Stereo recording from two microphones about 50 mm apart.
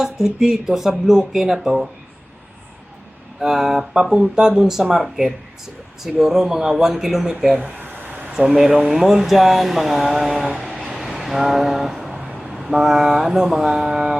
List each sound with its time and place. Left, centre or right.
0.0 s speech: centre
3.4 s speech: centre
7.8 s a sound: right
8.3 s speech: centre
10.9 s vehicle: centre
12.4 s speech: centre